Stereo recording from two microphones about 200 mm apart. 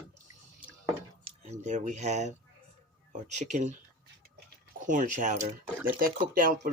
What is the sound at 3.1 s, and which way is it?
Speech, 35° right (ahead or behind).